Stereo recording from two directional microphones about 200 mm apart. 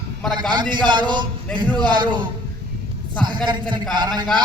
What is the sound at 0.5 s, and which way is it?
A man's voice, 20° right (ahead or behind).